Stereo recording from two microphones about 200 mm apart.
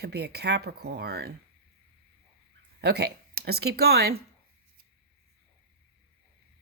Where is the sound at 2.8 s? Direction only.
55° right (ahead or behind).